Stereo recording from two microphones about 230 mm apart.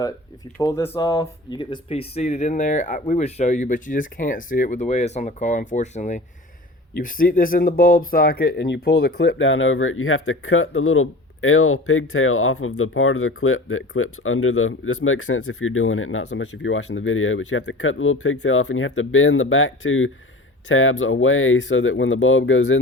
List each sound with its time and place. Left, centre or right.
0.6 s speech: centre; by 22.8 s left